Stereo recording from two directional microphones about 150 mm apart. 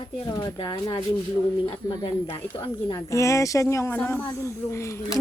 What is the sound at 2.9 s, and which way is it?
Speech, 20° left (ahead or behind).